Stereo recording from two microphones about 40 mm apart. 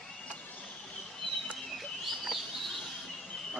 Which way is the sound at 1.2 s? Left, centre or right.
Left.